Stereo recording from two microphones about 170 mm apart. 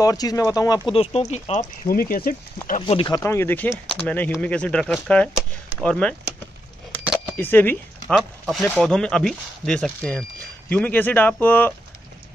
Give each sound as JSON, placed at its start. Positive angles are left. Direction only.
{"t": 0.0, "sound": "speech", "side_deg": 20}
{"t": 0.8, "sound": "speech", "side_deg": 35}
{"t": 1.9, "sound": "speech", "side_deg": 60}
{"t": 2.8, "sound": "speech", "side_deg": 30}
{"t": 3.2, "sound": "speech", "side_deg": 15}
{"t": 7.3, "sound": "speech", "side_deg": 10}